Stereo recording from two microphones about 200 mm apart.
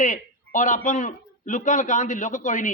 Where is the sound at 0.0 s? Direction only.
40° left (ahead or behind).